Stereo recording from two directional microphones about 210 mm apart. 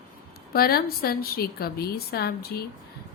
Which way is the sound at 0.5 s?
45° left (ahead or behind).